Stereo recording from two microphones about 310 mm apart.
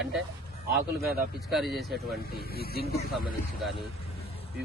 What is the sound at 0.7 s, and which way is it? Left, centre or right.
Speech, right.